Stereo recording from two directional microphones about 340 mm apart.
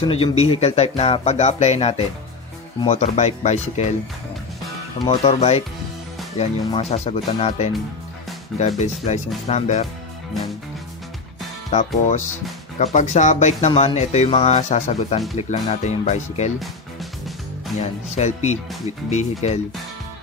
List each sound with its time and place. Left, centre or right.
0.1 s speech: centre
5.0 s speech: centre
12.7 s speech: left
17.7 s speech: centre